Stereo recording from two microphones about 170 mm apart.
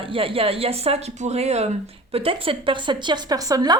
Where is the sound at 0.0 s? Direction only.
30° right (ahead or behind).